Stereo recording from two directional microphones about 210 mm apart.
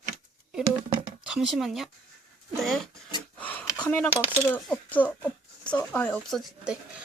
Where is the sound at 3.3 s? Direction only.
5° left (ahead or behind).